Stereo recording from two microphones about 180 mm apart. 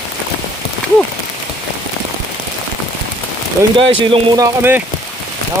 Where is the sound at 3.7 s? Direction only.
30° right (ahead or behind).